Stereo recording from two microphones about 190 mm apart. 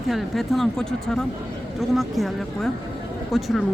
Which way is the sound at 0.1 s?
Centre (ahead or behind).